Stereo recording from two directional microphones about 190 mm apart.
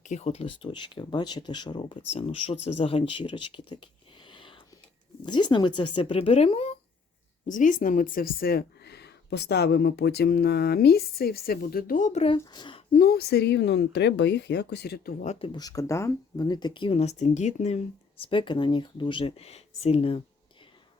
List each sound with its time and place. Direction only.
0.0 s speech: 35° left (ahead or behind)
7.4 s speech: 45° left (ahead or behind); by 12.8 s 25° left (ahead or behind)
12.9 s speech: 50° left (ahead or behind)
15.2 s speech: 35° left (ahead or behind)
15.5 s speech: 20° left (ahead or behind)